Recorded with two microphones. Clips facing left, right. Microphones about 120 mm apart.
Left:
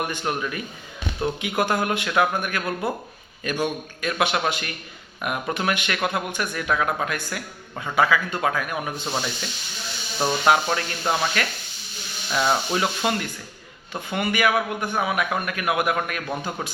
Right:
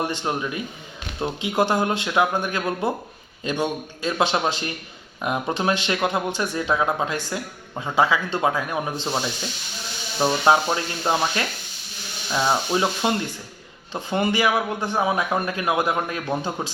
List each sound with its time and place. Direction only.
0.0 s speech: 25° right (ahead or behind)
10.4 s speech: 20° right (ahead or behind)